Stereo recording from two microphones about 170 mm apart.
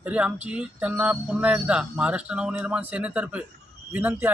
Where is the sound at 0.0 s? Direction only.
10° right (ahead or behind).